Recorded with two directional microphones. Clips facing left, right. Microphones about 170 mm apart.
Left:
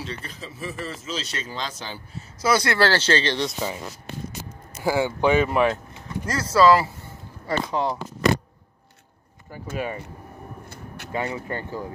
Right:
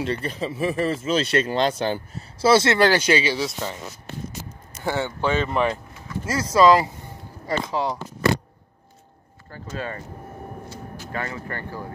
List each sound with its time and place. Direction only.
0.0 s speech: 65° right (ahead or behind)
2.1 s speech: 30° right (ahead or behind); by 3.5 s 5° right (ahead or behind)
4.8 s speech: 10° left (ahead or behind)
6.2 s speech: 10° right (ahead or behind)
7.7 s speech: 25° left (ahead or behind)
9.8 s speech: 15° left (ahead or behind)
11.1 s speech: 15° left (ahead or behind)